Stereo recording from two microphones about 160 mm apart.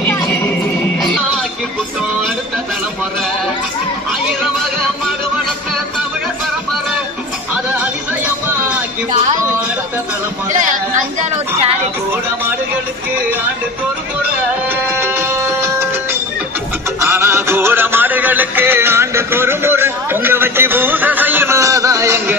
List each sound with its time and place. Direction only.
0.9 s music: centre (ahead or behind)
7.5 s music: 10° right (ahead or behind)
10.5 s speech: 50° right (ahead or behind)
14.7 s music: 15° right (ahead or behind)